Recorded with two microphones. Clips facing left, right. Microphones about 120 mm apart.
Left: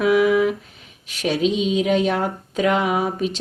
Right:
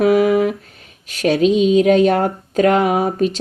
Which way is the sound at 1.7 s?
50° right (ahead or behind).